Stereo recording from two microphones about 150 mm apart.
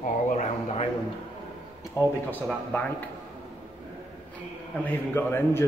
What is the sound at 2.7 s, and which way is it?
Speech, 10° left (ahead or behind).